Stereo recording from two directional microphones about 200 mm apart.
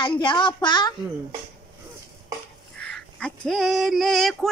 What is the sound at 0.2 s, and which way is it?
Speech, 25° left (ahead or behind).